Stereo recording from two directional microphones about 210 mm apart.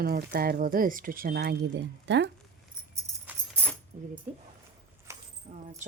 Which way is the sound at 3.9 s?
35° right (ahead or behind).